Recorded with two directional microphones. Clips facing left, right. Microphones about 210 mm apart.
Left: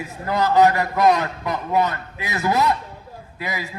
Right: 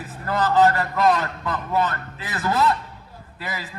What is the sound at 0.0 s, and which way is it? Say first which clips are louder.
A man's voice: left 2 dB; 15° left (ahead or behind).